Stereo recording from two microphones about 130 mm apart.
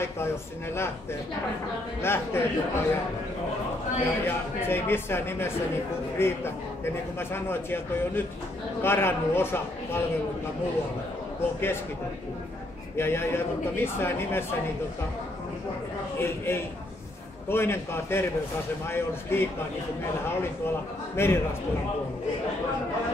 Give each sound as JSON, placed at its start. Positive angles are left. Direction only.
{"t": 2.0, "sound": "a man's voice", "side_deg": 20}
{"t": 4.0, "sound": "a man's voice", "side_deg": 20}
{"t": 12.9, "sound": "a man's voice", "side_deg": 20}
{"t": 16.2, "sound": "a man's voice", "side_deg": 20}
{"t": 21.2, "sound": "a man's voice", "side_deg": 20}